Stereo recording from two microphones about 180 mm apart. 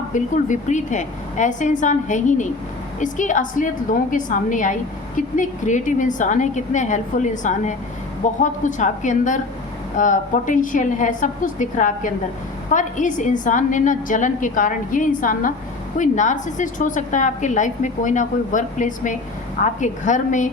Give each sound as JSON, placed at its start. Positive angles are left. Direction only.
{"t": 0.1, "sound": "a woman's voice", "side_deg": 45}